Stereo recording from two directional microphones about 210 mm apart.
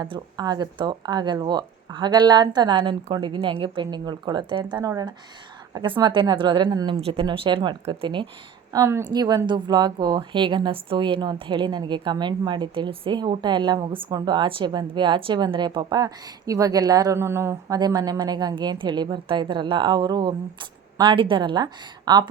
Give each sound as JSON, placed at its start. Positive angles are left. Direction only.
{"t": 0.0, "sound": "speech", "side_deg": -20}